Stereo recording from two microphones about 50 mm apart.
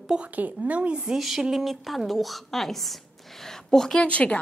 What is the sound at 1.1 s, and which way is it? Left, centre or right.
A woman's voice, centre.